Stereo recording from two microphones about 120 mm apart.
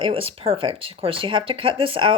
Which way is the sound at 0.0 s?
50° right (ahead or behind).